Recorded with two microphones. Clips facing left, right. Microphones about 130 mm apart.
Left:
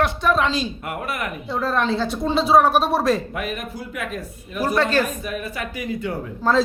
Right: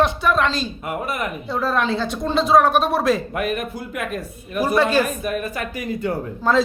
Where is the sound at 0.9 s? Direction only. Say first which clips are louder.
Right 2 dB; 20° right (ahead or behind).